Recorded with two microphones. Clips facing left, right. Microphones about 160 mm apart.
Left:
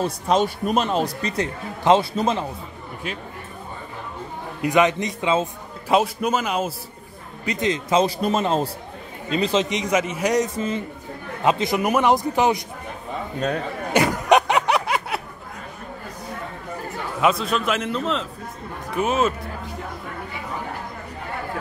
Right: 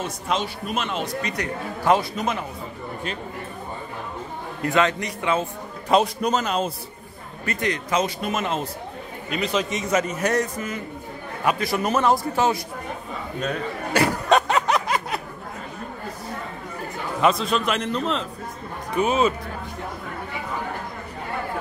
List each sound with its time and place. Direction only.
0.0 s a man's voice: 40° left (ahead or behind)
4.6 s a man's voice: 15° left (ahead or behind)
5.9 s a man's voice: 5° left (ahead or behind)
7.4 s a man's voice: 20° left (ahead or behind)
13.9 s a sound: 15° left (ahead or behind)
17.2 s a man's voice: centre (ahead or behind)